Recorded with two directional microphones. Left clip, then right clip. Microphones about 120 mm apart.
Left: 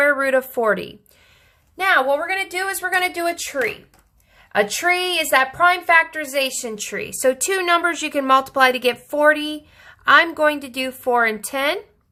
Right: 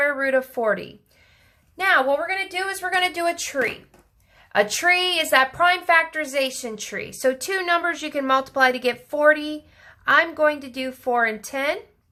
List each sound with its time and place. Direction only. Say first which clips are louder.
0.0 s speech: left 4 dB; 30° left (ahead or behind)
1.7 s a woman's voice: left 2 dB; 15° left (ahead or behind)